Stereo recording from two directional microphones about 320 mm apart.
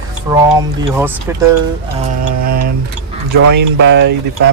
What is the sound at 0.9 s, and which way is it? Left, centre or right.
Speech, centre.